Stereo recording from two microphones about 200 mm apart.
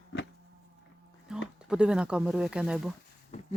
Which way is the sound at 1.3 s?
5° right (ahead or behind).